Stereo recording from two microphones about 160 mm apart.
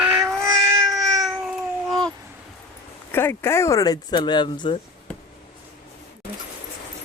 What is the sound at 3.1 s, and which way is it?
Speech, 15° left (ahead or behind).